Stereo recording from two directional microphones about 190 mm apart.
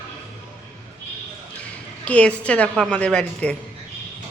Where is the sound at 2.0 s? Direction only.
5° left (ahead or behind).